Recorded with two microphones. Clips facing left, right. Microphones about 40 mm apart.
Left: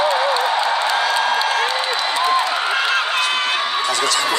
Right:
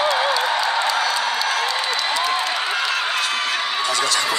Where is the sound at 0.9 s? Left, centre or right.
Left.